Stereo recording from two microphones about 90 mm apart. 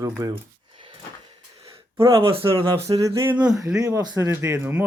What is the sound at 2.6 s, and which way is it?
Speech, 40° right (ahead or behind).